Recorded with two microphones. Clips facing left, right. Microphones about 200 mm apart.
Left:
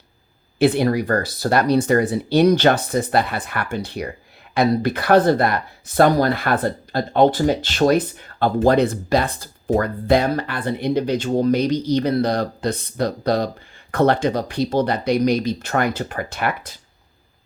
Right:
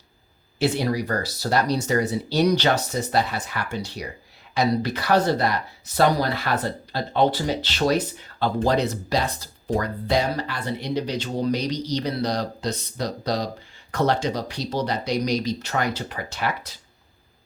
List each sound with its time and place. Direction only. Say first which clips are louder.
0.6 s speech: left 6 dB; 55° left (ahead or behind)